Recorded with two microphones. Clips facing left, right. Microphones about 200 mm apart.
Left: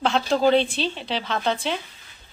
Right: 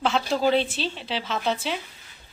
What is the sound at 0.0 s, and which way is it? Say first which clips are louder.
A woman's voice: left 3 dB; 5° right (ahead or behind).